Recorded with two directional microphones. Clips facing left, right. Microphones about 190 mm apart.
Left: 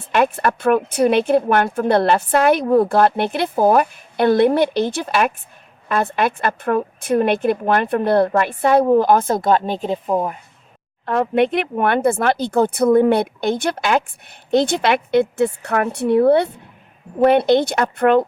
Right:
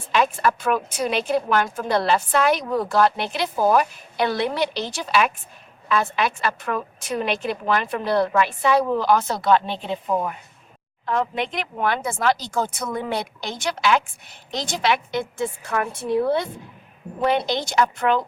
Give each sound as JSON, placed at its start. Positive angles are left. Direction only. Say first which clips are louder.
{"t": 0.0, "sound": "a woman's voice", "louder": "left 3 dB", "side_deg": 60}
{"t": 11.0, "sound": "speech", "louder": "left 7 dB", "side_deg": 60}